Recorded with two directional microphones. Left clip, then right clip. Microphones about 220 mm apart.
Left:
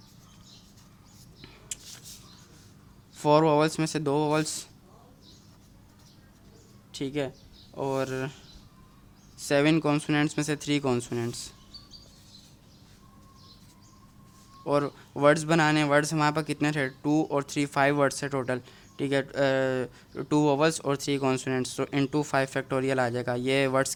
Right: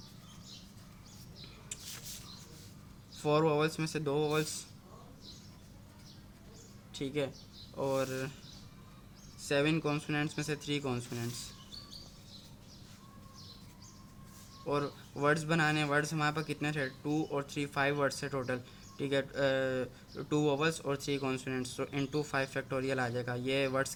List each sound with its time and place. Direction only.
3.2 s speech: 40° left (ahead or behind)
6.9 s speech: 35° left (ahead or behind)
9.4 s speech: 40° left (ahead or behind)
14.6 s speech: 40° left (ahead or behind)